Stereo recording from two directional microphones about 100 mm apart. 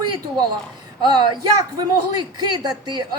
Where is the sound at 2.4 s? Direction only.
45° right (ahead or behind).